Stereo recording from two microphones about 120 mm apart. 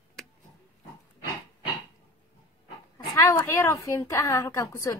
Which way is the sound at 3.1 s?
25° left (ahead or behind).